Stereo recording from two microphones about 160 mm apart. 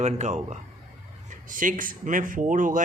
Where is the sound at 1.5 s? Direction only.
55° right (ahead or behind).